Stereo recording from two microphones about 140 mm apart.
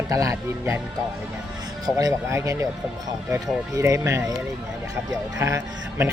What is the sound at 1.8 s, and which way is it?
Speech, 25° right (ahead or behind).